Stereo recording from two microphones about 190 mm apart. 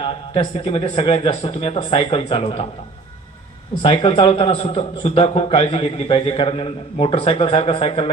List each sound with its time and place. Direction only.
0.0 s a man's voice: 30° left (ahead or behind)
3.8 s a man's voice: 30° left (ahead or behind)